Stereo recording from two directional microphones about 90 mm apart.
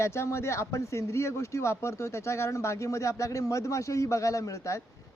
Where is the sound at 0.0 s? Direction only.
30° left (ahead or behind).